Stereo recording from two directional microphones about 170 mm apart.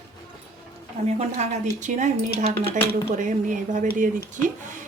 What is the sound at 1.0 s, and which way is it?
A woman's voice, 40° right (ahead or behind).